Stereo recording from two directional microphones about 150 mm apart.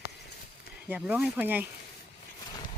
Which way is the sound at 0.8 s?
10° right (ahead or behind).